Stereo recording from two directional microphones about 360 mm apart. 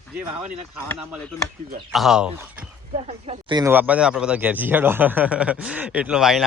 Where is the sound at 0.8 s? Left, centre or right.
Centre.